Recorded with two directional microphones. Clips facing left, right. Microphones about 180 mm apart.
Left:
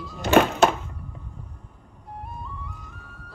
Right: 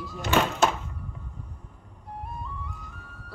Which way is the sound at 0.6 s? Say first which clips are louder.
Left 4 dB; 65° left (ahead or behind).